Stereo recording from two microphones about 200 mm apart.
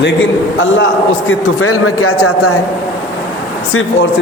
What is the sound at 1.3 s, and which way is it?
A man's voice, 90° left.